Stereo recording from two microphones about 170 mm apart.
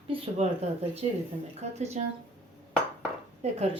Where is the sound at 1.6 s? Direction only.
40° right (ahead or behind).